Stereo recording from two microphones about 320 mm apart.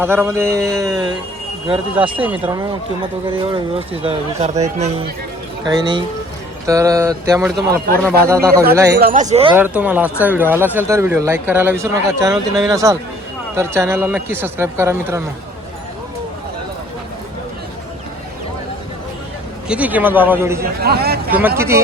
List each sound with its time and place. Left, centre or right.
0.0 s speech: centre
9.0 s speech: right
9.6 s a man's voice: centre
19.6 s a man's voice: centre
20.6 s speech: right